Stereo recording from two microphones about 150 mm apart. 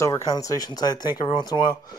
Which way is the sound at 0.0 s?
20° left (ahead or behind).